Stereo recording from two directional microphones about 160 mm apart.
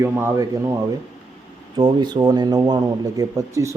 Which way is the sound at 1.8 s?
25° right (ahead or behind).